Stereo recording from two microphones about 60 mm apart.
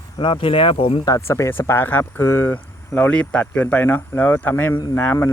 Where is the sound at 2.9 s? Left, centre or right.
Left.